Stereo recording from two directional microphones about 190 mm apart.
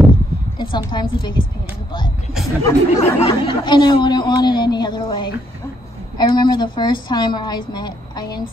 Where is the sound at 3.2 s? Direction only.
25° left (ahead or behind).